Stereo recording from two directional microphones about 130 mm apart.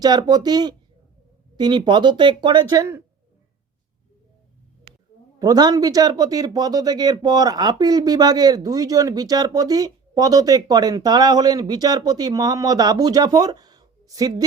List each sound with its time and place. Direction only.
0.0 s speech: 30° right (ahead or behind)
5.4 s speech: 30° right (ahead or behind)